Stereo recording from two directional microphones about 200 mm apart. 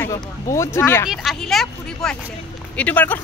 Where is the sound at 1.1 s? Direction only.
Centre (ahead or behind).